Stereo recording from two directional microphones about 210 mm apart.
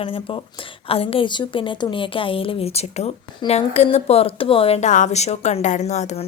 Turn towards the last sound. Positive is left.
turn(degrees=30)  # may be behind; listen again after turning